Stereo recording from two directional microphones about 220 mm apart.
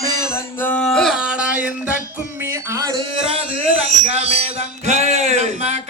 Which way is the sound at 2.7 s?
20° right (ahead or behind).